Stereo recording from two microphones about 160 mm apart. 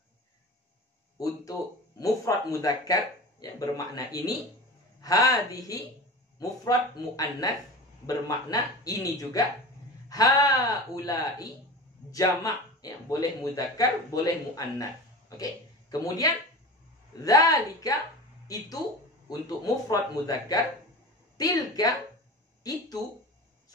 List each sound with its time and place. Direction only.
1.1 s a man's voice: 20° left (ahead or behind)
19.2 s speech: 25° left (ahead or behind)